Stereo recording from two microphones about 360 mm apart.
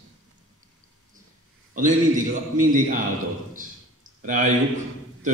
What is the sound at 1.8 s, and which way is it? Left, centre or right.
Speech, right.